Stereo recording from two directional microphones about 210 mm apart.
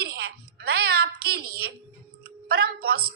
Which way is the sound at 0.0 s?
50° right (ahead or behind).